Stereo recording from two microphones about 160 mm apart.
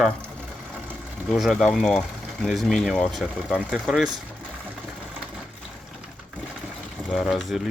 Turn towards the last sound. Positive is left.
turn(degrees=0)  # may be behind; listen again after turning